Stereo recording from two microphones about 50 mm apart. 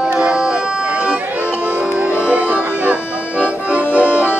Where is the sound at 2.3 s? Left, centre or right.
Right.